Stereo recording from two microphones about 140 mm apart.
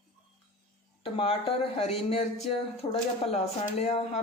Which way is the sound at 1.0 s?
45° left (ahead or behind).